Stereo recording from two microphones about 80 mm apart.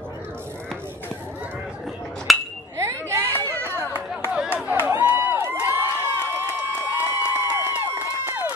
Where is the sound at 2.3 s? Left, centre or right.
Centre.